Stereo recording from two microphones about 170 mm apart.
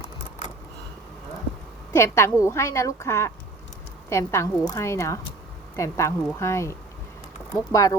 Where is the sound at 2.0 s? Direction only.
15° left (ahead or behind).